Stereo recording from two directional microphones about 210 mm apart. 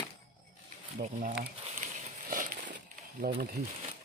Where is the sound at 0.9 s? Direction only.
40° right (ahead or behind).